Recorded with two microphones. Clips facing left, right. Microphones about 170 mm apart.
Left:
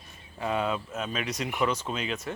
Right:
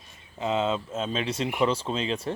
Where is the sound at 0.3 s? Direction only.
20° right (ahead or behind).